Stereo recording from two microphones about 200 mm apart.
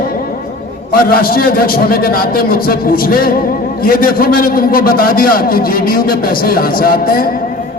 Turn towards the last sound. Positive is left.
turn(degrees=45)  # may be behind; listen again after turning